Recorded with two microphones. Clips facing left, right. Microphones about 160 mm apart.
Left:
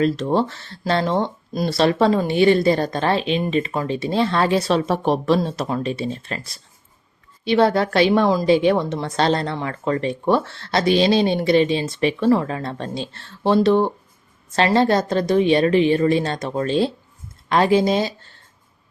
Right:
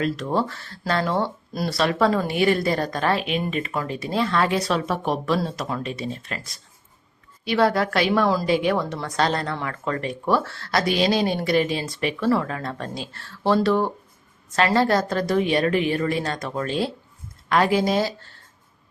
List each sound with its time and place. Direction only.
0.0 s speech: 25° left (ahead or behind)